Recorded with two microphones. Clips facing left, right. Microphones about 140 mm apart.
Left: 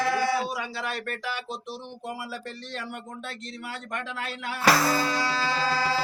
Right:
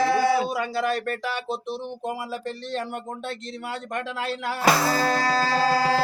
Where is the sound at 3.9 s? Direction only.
35° right (ahead or behind).